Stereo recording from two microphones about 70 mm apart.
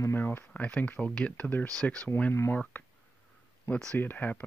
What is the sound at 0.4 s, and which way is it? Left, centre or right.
Speech, left.